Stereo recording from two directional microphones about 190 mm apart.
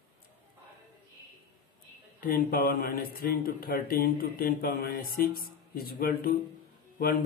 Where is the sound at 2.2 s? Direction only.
50° left (ahead or behind).